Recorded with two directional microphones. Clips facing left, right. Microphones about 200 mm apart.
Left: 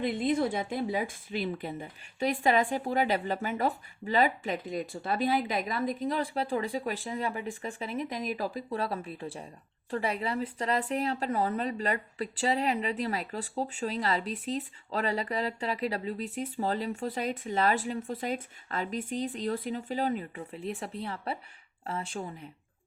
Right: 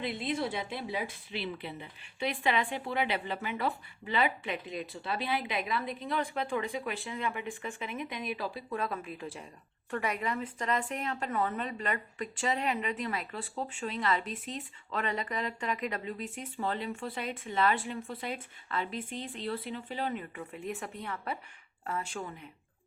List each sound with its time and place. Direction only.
0.0 s speech: 50° left (ahead or behind); by 22.4 s 30° left (ahead or behind)